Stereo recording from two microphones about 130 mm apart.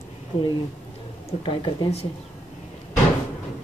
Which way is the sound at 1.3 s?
40° left (ahead or behind).